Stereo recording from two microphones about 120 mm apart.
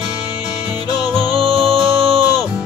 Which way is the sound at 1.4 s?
50° right (ahead or behind).